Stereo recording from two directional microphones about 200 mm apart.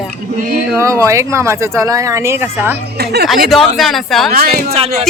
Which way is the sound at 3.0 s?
55° right (ahead or behind).